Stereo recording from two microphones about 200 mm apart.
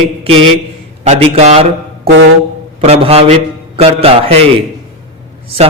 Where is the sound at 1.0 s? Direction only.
30° right (ahead or behind).